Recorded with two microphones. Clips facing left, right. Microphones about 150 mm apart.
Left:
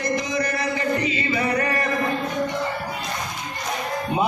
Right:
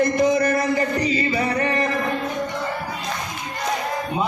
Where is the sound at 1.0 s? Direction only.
35° right (ahead or behind).